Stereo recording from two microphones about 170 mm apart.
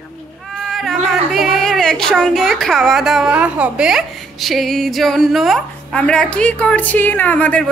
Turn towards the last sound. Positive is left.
turn(degrees=10)  # may be behind; listen again after turning